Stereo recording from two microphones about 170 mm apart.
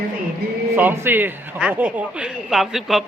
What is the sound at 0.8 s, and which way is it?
Speech, 10° right (ahead or behind).